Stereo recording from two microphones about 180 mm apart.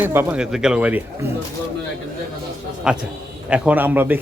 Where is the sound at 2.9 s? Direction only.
5° right (ahead or behind).